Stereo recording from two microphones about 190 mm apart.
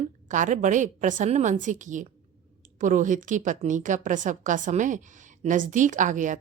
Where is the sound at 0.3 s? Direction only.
40° right (ahead or behind).